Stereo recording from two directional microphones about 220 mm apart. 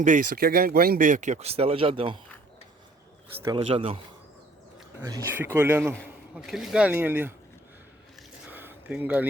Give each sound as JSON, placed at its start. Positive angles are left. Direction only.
{"t": 0.0, "sound": "speech", "side_deg": -35}
{"t": 3.4, "sound": "speech", "side_deg": -20}
{"t": 5.0, "sound": "a man's voice", "side_deg": -15}
{"t": 8.4, "sound": "a sound", "side_deg": -10}